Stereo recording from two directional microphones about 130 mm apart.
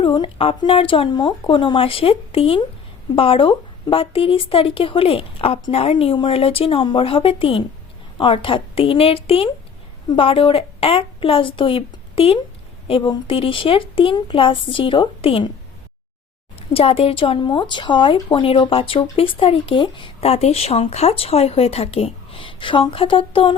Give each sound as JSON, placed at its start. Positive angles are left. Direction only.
{"t": 0.0, "sound": "speech", "side_deg": 40}
{"t": 16.6, "sound": "speech", "side_deg": 50}